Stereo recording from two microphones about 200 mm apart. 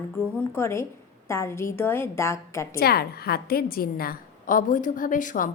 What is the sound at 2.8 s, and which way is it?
A woman's voice, 50° left (ahead or behind).